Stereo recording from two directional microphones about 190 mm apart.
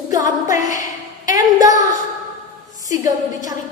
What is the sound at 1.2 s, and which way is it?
Speech, 20° right (ahead or behind).